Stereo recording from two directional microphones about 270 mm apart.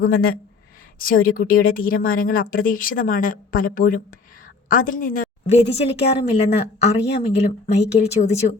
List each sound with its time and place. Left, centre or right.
0.0 s a woman's voice: left